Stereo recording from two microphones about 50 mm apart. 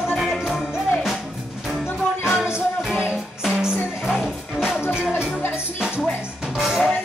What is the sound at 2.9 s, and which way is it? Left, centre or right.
Music, centre.